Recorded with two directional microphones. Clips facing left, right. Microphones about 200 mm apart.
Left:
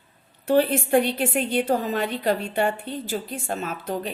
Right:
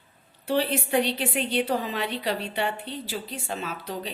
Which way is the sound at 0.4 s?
50° left (ahead or behind).